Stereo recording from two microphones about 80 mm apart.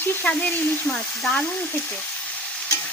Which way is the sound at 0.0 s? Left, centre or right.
Left.